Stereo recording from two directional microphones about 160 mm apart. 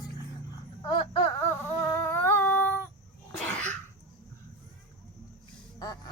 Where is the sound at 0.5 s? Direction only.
30° left (ahead or behind).